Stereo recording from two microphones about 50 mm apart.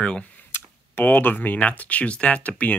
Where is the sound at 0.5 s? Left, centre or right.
Left.